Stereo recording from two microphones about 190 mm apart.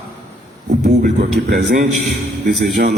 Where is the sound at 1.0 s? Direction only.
50° right (ahead or behind).